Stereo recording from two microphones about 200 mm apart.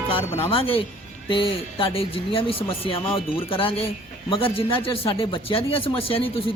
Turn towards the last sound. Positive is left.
turn(degrees=25)  # may be behind; listen again after turning